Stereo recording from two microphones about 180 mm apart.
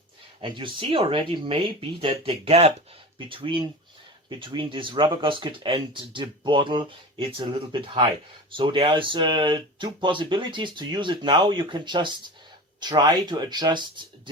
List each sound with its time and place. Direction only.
0.4 s speech: 25° right (ahead or behind)